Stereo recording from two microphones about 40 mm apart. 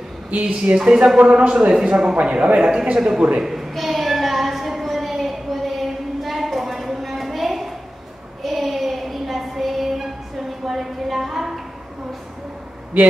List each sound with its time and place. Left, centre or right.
0.3 s a woman's voice: right
0.7 s speech: right
2.2 s speech: right
3.4 s a sound: centre
8.4 s child singing: centre
10.6 s a sound: centre
12.9 s speech: right